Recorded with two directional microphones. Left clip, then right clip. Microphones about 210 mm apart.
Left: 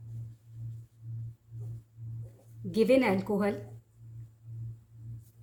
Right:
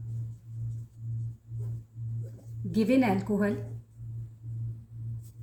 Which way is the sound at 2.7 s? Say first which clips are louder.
Left 2 dB; 30° left (ahead or behind).